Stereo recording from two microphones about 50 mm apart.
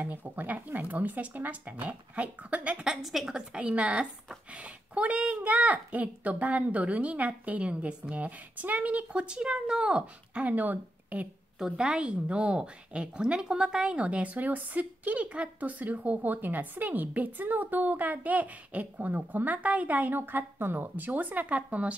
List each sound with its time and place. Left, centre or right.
0.0 s a woman's voice: right
2.8 s a woman's voice: centre
3.5 s a woman's voice: right
10.5 s speech: right
11.5 s a woman's voice: centre; by 21.9 s right